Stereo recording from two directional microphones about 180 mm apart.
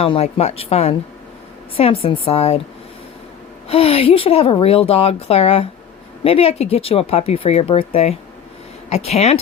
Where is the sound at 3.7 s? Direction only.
30° left (ahead or behind).